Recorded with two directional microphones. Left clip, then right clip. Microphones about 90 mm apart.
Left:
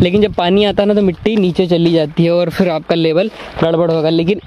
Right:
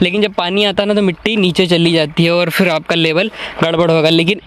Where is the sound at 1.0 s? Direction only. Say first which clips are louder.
Even; 15° left (ahead or behind).